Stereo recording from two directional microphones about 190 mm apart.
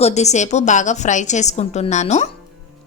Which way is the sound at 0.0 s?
35° left (ahead or behind).